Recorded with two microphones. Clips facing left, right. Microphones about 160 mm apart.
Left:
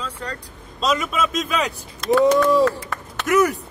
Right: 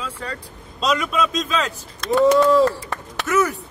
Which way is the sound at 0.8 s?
Centre (ahead or behind).